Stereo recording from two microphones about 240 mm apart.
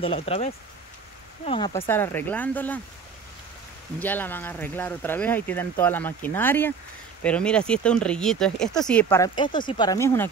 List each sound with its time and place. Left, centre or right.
0.0 s speech: left
1.9 s speech: centre
4.0 s speech: centre